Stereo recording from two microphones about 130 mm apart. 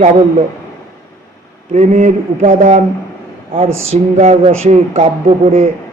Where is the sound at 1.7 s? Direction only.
65° right (ahead or behind).